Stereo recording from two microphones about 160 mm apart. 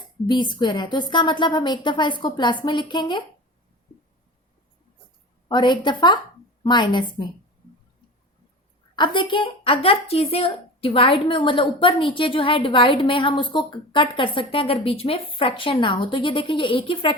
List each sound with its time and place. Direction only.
0.3 s a woman's voice: 30° left (ahead or behind)
5.5 s a woman's voice: 30° left (ahead or behind)
9.0 s speech: 30° left (ahead or behind)